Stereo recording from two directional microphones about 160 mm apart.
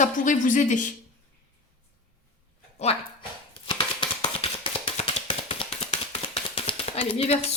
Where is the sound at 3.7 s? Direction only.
30° left (ahead or behind).